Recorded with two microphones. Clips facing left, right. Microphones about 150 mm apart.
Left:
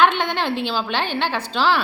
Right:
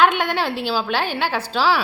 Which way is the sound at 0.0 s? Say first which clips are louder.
Even; 10° right (ahead or behind).